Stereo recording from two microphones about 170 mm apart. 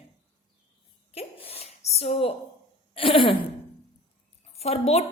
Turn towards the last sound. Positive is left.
turn(degrees=40)  # may be behind; listen again after turning